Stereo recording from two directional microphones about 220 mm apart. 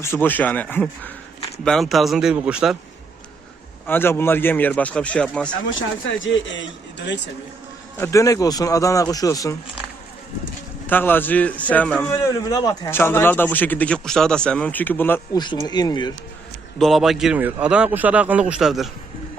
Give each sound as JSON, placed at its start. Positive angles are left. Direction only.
{"t": 0.0, "sound": "a man's voice", "side_deg": 10}
{"t": 3.8, "sound": "a man's voice", "side_deg": 10}
{"t": 6.1, "sound": "a man's voice", "side_deg": 60}
{"t": 7.9, "sound": "a man's voice", "side_deg": 10}
{"t": 10.8, "sound": "a man's voice", "side_deg": 10}
{"t": 16.7, "sound": "a man's voice", "side_deg": 0}